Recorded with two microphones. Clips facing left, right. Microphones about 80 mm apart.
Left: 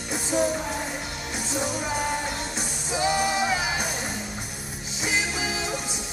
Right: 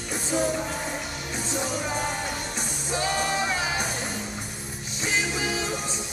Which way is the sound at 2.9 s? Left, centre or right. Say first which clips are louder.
Left 2 dB; centre.